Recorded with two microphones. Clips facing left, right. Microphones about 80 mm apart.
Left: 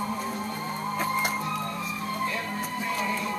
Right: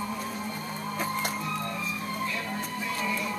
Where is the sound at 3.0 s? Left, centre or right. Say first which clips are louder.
Even; left.